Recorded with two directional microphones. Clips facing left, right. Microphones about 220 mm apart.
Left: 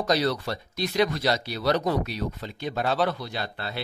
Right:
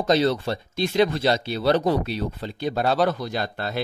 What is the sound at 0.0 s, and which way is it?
Speech, 25° right (ahead or behind).